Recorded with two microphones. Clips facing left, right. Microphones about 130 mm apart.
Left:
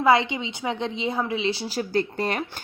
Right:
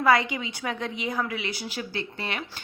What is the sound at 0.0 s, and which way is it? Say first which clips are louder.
A woman's voice: left 2 dB; 25° left (ahead or behind).